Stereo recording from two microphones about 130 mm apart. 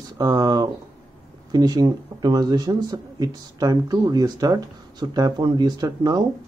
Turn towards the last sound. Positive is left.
turn(degrees=-30)  # may be behind; listen again after turning